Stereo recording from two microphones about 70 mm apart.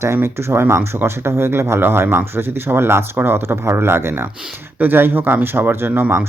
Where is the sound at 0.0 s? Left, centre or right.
Right.